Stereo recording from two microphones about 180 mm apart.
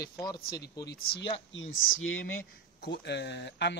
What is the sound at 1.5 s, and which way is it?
Speech, 90° left.